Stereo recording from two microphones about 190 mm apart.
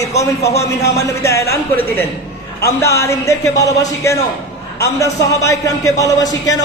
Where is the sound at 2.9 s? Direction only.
15° left (ahead or behind).